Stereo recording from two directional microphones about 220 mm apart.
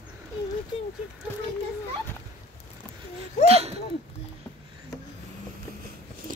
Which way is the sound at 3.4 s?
30° right (ahead or behind).